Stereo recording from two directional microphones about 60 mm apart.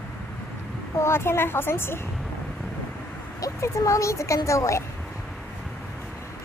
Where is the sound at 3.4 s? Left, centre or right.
Left.